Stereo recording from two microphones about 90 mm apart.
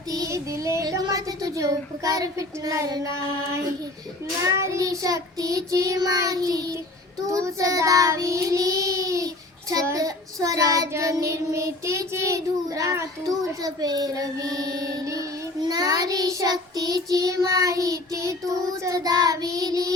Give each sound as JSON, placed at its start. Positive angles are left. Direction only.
{"t": 0.1, "sound": "child singing", "side_deg": -40}
{"t": 4.5, "sound": "child singing", "side_deg": -35}